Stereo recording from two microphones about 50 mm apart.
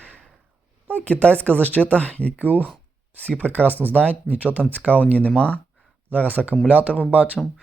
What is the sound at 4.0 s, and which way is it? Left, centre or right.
Speech, left.